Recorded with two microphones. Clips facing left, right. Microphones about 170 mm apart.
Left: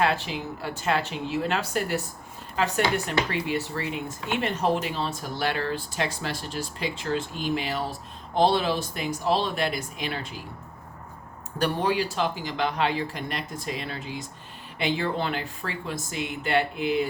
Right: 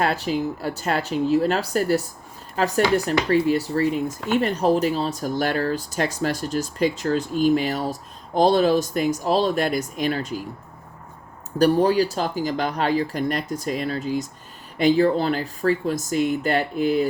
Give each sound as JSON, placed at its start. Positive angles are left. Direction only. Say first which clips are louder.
{"t": 0.0, "sound": "speech", "louder": "right 4 dB", "side_deg": -40}
{"t": 11.6, "sound": "speech", "louder": "right 8 dB", "side_deg": -40}